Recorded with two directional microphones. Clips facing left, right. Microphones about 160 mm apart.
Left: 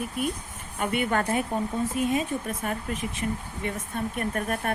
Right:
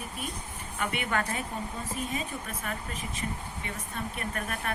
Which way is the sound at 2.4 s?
40° left (ahead or behind).